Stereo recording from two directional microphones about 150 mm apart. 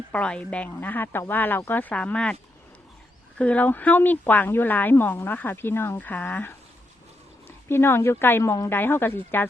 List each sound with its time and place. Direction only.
0.1 s speech: 5° left (ahead or behind)